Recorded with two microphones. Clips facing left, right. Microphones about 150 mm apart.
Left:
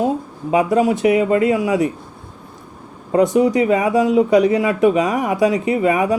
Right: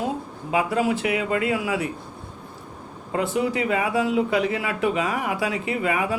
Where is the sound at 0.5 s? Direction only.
20° left (ahead or behind).